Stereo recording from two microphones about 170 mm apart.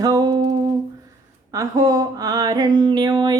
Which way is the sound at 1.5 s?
20° right (ahead or behind).